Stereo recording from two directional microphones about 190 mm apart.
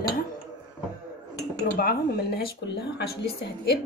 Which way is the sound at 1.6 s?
50° left (ahead or behind).